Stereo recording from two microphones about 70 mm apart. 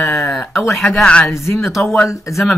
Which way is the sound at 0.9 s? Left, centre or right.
Centre.